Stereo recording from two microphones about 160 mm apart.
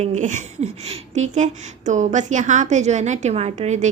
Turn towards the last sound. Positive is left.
turn(degrees=-45)  # may be behind; listen again after turning